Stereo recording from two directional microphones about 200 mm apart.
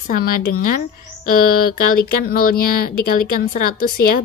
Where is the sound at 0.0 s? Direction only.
45° left (ahead or behind).